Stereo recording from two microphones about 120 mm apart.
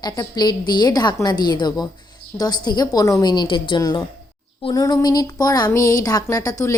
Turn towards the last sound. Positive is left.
turn(degrees=30)  # may be behind; listen again after turning